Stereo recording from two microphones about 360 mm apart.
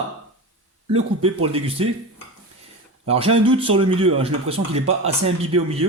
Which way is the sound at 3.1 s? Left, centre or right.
Centre.